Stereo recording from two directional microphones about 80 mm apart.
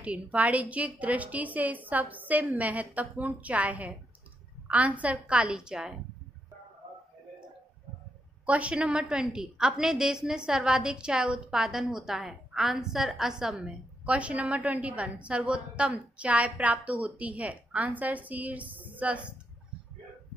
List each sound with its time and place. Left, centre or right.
0.0 s a woman's voice: centre
8.5 s a woman's voice: centre
18.8 s a sound: centre